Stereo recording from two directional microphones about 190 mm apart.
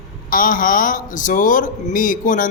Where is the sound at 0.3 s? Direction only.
45° left (ahead or behind).